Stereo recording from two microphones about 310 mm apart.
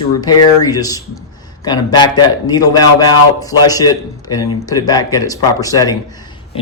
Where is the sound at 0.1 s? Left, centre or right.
Centre.